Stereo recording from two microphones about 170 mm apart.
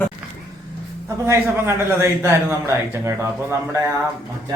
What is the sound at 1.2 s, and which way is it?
Speech, 15° right (ahead or behind).